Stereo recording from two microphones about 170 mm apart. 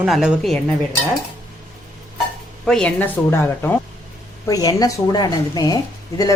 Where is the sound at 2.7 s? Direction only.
5° left (ahead or behind); by 5.7 s 25° left (ahead or behind).